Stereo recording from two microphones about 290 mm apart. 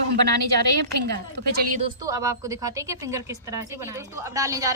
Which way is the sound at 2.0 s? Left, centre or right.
Centre.